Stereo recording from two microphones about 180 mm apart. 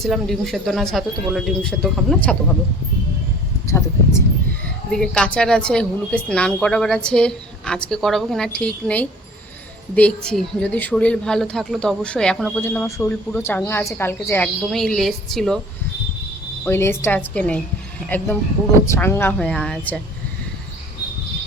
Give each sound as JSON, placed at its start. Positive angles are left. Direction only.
{"t": 0.0, "sound": "a woman's voice", "side_deg": 0}
{"t": 3.7, "sound": "a sound", "side_deg": 15}
{"t": 4.9, "sound": "a woman's voice", "side_deg": 5}
{"t": 16.6, "sound": "speech", "side_deg": 15}